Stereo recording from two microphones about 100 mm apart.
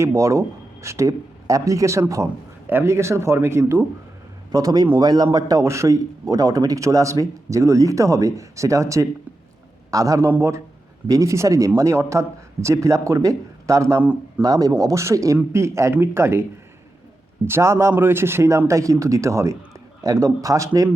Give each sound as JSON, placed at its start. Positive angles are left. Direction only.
{"t": 0.0, "sound": "a man's voice", "side_deg": -30}
{"t": 4.5, "sound": "a man's voice", "side_deg": -40}
{"t": 14.0, "sound": "a man's voice", "side_deg": -15}
{"t": 14.4, "sound": "a man's voice", "side_deg": -40}
{"t": 17.4, "sound": "a man's voice", "side_deg": -25}